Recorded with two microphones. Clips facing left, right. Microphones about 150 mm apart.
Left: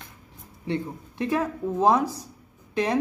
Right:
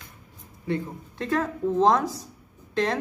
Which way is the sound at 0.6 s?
20° left (ahead or behind).